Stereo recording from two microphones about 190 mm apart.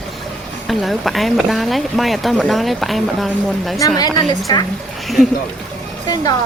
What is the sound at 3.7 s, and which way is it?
Speech, 20° left (ahead or behind).